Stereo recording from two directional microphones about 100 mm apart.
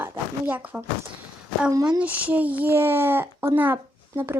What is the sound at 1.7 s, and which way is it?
Speech, 40° right (ahead or behind).